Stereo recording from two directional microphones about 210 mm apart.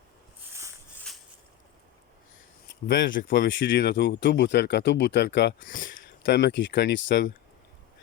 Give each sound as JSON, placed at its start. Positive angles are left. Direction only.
{"t": 1.1, "sound": "a sound", "side_deg": 0}
{"t": 2.8, "sound": "speech", "side_deg": 50}
{"t": 3.7, "sound": "speech", "side_deg": 55}
{"t": 5.5, "sound": "speech", "side_deg": 40}